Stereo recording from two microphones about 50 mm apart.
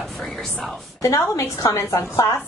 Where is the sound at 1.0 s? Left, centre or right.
Left.